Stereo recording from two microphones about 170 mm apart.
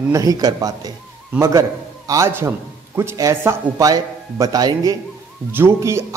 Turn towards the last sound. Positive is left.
turn(degrees=-15)  # may be behind; listen again after turning